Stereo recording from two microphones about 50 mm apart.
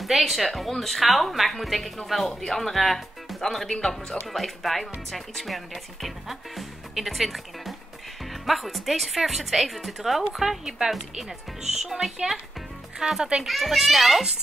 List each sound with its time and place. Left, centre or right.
0.0 s speech: centre
13.2 s speech: centre
13.5 s speech: centre